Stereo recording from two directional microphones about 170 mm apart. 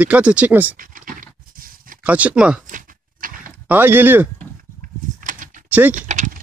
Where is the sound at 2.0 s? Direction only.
10° right (ahead or behind).